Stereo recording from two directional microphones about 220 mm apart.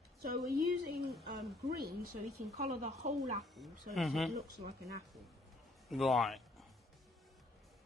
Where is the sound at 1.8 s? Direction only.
45° right (ahead or behind).